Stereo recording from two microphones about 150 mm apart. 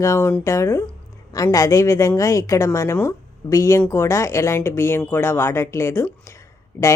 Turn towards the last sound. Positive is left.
turn(degrees=20)  # may be behind; listen again after turning